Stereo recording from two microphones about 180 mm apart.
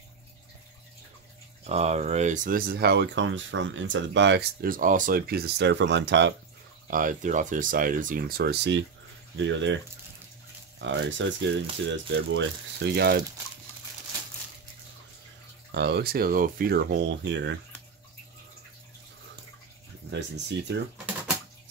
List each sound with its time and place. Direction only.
1.6 s speech: 35° right (ahead or behind); by 6.3 s 75° right (ahead or behind)
6.9 s speech: 50° right (ahead or behind); by 8.8 s 70° right (ahead or behind)
9.4 s speech: 90° right
10.8 s speech: 90° right; by 13.2 s 65° right (ahead or behind)
15.7 s speech: 65° right (ahead or behind); by 17.6 s 80° right
20.1 s speech: 75° right (ahead or behind)